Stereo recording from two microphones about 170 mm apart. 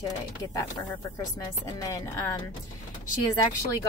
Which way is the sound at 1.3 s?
20° left (ahead or behind).